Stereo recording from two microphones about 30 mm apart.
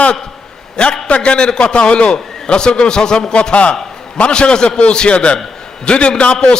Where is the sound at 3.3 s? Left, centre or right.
Left.